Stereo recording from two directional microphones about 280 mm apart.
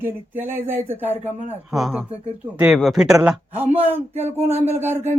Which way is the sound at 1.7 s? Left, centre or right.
Centre.